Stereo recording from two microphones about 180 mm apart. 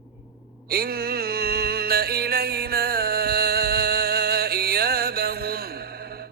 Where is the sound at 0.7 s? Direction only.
60° right (ahead or behind).